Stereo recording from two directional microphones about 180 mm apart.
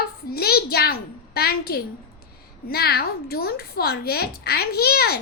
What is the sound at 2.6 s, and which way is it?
A child's voice, 60° left (ahead or behind).